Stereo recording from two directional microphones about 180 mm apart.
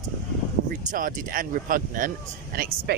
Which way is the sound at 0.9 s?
50° right (ahead or behind).